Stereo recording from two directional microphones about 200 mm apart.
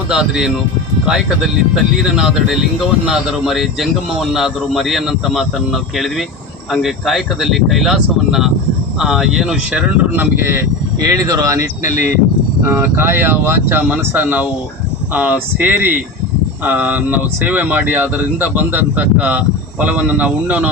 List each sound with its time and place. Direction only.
0.1 s speech: 5° right (ahead or behind)
11.9 s speech: 40° left (ahead or behind)
12.6 s speech: 10° right (ahead or behind)